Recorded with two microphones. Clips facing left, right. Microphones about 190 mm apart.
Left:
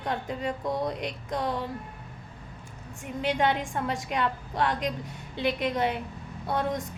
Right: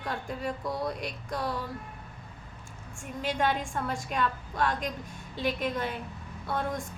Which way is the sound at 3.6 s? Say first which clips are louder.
Left 2 dB; 15° left (ahead or behind).